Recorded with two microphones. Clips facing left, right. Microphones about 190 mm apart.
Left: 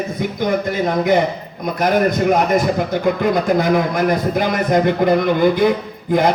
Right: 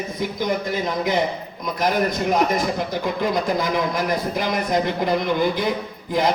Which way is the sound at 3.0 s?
55° left (ahead or behind).